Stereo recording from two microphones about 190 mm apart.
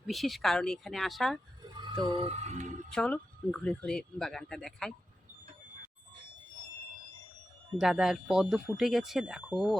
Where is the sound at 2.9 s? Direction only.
5° left (ahead or behind).